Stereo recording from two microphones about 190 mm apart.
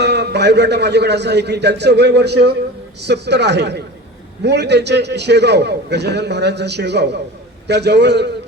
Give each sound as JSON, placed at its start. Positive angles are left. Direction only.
{"t": 0.0, "sound": "a man's voice", "side_deg": -60}